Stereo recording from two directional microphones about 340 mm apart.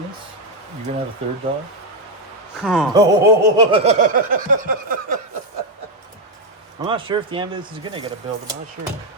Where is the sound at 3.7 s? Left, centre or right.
Centre.